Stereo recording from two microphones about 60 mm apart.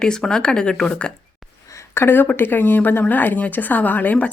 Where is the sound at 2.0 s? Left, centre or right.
Left.